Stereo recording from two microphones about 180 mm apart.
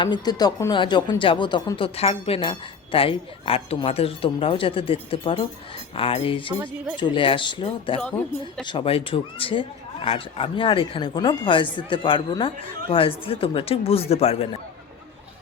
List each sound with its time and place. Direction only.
0.0 s speech: 25° left (ahead or behind)
6.0 s a sound: 30° left (ahead or behind)
6.9 s speech: 25° left (ahead or behind)